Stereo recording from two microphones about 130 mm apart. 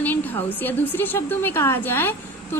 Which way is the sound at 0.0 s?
15° left (ahead or behind).